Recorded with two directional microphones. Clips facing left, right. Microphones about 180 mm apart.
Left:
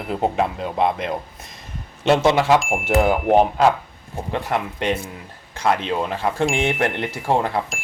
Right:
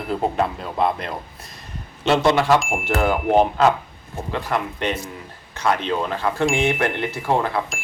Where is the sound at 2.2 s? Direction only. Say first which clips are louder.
Right 2 dB; 15° left (ahead or behind).